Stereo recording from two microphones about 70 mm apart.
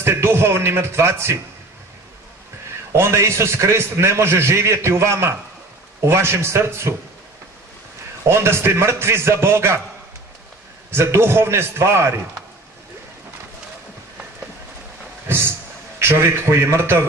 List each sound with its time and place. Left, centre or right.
0.0 s a man's voice: right
2.9 s a man's voice: right
8.3 s a man's voice: right
10.9 s a man's voice: right
15.2 s a sound: right
16.0 s a man's voice: right